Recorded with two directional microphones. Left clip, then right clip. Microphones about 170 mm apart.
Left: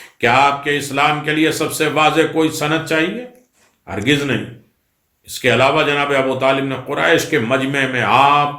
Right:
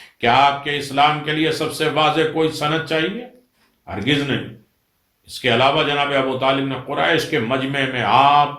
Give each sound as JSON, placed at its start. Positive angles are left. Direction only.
{"t": 0.2, "sound": "a man's voice", "side_deg": 20}
{"t": 5.4, "sound": "a man's voice", "side_deg": 20}